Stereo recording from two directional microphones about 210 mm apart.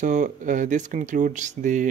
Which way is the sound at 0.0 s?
35° right (ahead or behind).